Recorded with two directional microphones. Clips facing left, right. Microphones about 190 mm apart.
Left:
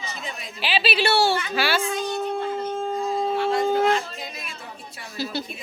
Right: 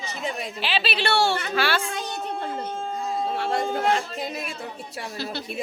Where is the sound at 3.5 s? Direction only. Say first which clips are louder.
Left 3 dB; 55° right (ahead or behind).